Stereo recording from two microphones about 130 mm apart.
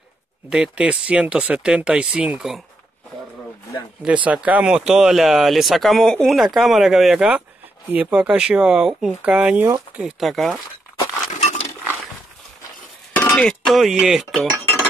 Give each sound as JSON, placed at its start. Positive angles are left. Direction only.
{"t": 0.5, "sound": "speech", "side_deg": -5}
{"t": 4.0, "sound": "speech", "side_deg": -10}
{"t": 11.3, "sound": "a sound", "side_deg": 65}
{"t": 13.3, "sound": "speech", "side_deg": 5}